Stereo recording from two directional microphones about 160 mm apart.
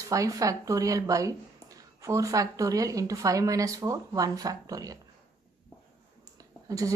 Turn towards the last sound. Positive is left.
turn(degrees=-20)  # may be behind; listen again after turning